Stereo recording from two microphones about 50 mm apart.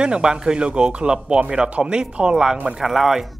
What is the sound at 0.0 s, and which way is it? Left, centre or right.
A man's voice, centre.